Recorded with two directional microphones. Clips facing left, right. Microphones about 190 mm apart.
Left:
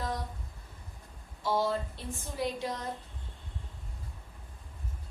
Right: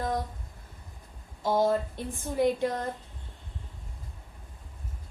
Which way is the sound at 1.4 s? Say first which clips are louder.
Right 5 dB; 45° right (ahead or behind).